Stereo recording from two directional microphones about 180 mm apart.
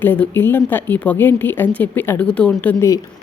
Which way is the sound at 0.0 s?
10° left (ahead or behind).